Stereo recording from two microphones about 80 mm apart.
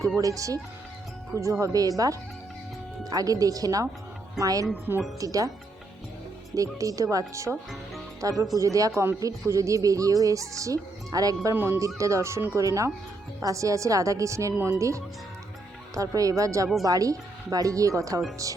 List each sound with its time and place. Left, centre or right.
0.2 s speech: right
4.7 s speech: right
5.2 s speech: right
6.5 s speech: right
11.5 s speech: right
11.9 s speech: right